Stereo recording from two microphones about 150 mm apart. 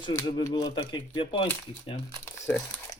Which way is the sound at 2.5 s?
10° left (ahead or behind).